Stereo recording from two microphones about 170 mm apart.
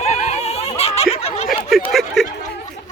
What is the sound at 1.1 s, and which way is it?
Snicker, 35° left (ahead or behind).